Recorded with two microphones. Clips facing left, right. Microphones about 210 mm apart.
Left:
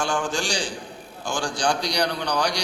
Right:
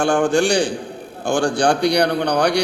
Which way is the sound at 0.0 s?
60° right (ahead or behind).